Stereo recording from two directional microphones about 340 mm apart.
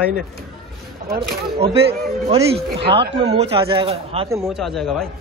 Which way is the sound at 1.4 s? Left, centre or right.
Centre.